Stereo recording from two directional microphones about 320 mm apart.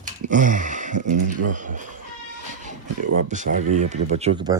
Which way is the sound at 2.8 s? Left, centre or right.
Right.